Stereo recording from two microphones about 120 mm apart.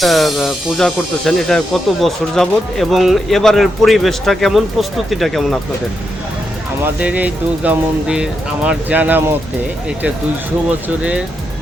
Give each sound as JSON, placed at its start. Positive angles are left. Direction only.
{"t": 0.0, "sound": "speech", "side_deg": 0}
{"t": 7.0, "sound": "speech", "side_deg": -10}
{"t": 10.7, "sound": "speech", "side_deg": -10}